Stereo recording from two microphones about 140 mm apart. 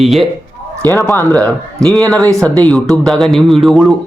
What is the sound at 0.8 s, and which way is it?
Speech, 20° left (ahead or behind).